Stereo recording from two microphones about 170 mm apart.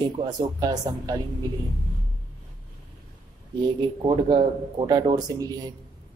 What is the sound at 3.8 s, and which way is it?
Speech, 25° right (ahead or behind).